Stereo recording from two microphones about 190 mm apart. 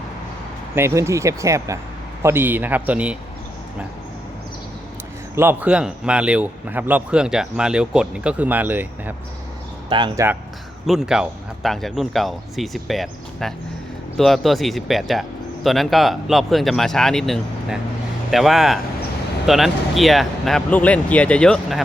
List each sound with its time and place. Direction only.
0.8 s speech: 15° right (ahead or behind)
5.3 s speech: 10° right (ahead or behind)
9.9 s speech: 25° right (ahead or behind)
10.8 s speech: centre (ahead or behind)